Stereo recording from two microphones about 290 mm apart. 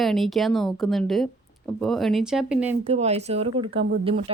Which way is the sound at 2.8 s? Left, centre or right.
Right.